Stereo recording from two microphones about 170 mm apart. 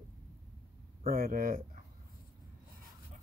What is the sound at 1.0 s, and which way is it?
Speech, 60° right (ahead or behind).